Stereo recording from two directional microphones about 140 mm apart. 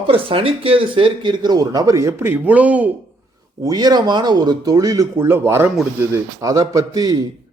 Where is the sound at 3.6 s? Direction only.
30° right (ahead or behind).